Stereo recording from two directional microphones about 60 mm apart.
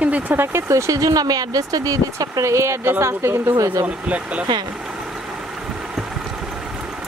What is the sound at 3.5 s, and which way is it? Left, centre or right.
Speech, right.